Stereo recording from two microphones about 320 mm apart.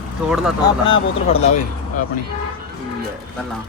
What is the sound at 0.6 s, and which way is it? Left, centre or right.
Speech, centre.